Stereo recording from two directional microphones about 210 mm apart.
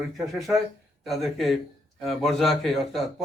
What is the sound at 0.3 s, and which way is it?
A man's voice, centre (ahead or behind).